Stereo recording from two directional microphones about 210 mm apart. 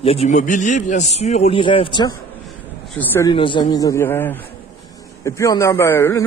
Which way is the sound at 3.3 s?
20° left (ahead or behind).